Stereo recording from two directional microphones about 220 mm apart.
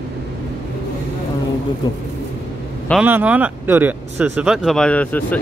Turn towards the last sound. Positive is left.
turn(degrees=5)  # may be behind; listen again after turning